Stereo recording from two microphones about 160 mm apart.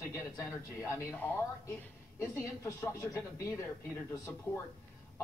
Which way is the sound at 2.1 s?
20° left (ahead or behind).